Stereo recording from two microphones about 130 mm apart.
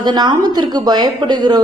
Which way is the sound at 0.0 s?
35° right (ahead or behind).